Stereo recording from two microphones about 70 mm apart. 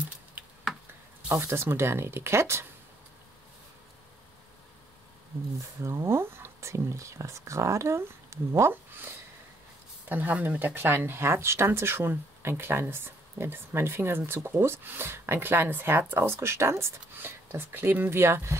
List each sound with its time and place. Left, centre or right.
1.3 s speech: right
5.8 s speech: right
10.0 s speech: right